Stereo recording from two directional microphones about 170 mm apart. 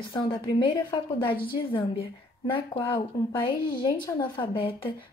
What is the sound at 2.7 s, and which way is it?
Speech, 25° left (ahead or behind).